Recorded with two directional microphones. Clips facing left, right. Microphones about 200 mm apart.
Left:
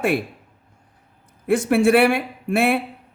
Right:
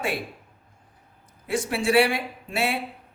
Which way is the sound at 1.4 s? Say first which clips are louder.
Left 8 dB; 55° left (ahead or behind).